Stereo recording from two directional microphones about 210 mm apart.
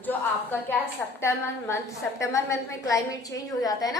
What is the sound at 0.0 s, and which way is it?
A woman's voice, 10° left (ahead or behind).